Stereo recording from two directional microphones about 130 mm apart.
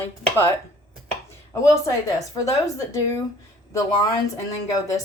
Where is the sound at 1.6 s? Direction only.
25° left (ahead or behind).